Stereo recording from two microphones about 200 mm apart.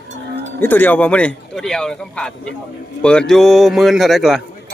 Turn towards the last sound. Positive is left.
turn(degrees=0)  # may be behind; listen again after turning